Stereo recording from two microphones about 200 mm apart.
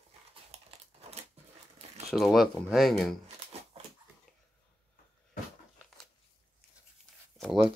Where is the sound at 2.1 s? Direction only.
Centre (ahead or behind).